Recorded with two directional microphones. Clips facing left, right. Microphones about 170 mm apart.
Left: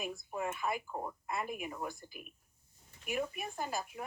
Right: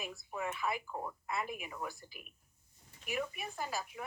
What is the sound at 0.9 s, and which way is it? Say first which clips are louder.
Speech: left 1 dB; 15° left (ahead or behind).